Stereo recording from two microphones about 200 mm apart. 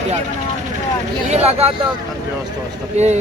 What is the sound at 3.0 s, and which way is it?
Speech, 35° right (ahead or behind).